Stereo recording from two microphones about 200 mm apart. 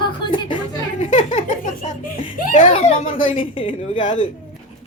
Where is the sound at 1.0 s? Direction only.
35° left (ahead or behind).